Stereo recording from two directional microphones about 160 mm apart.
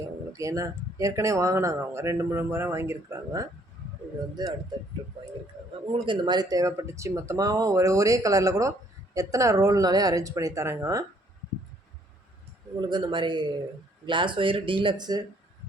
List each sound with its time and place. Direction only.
0.0 s speech: 20° right (ahead or behind)
5.8 s speech: 30° right (ahead or behind)
12.8 s speech: 30° right (ahead or behind)